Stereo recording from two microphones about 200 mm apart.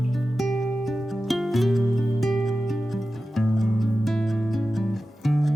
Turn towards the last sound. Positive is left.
turn(degrees=0)  # may be behind; listen again after turning